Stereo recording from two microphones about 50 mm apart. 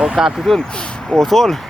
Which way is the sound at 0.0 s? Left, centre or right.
Centre.